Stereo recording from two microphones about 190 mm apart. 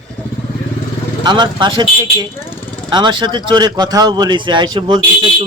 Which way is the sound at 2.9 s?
25° right (ahead or behind).